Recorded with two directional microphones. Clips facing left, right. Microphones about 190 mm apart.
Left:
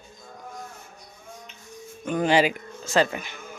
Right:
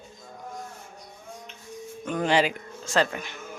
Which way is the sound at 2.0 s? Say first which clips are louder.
Left 2 dB; 5° left (ahead or behind).